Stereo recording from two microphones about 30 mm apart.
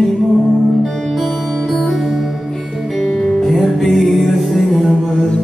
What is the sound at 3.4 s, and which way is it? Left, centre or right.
Music, centre.